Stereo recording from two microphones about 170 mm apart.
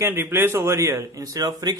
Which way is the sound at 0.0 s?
15° right (ahead or behind).